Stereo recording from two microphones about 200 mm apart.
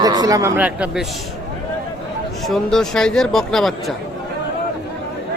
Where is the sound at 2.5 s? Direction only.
5° left (ahead or behind).